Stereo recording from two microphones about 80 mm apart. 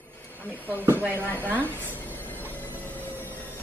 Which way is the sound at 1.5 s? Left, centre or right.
Left.